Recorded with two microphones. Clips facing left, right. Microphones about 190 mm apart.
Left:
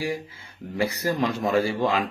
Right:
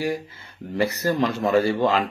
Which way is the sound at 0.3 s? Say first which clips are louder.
Right 1 dB; 10° left (ahead or behind).